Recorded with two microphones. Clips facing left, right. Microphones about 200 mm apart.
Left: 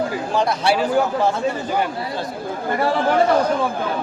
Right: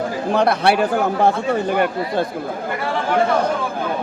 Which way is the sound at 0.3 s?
60° right (ahead or behind).